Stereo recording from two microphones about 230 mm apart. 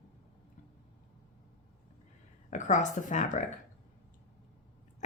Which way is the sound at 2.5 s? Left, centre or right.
Left.